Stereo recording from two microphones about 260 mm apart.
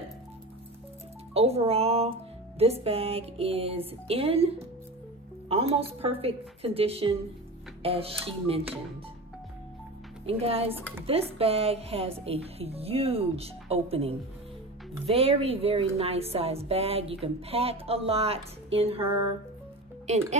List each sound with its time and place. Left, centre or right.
1.3 s a woman's voice: right
10.2 s a woman's voice: right